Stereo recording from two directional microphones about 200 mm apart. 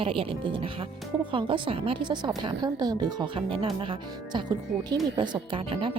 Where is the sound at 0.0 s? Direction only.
25° right (ahead or behind).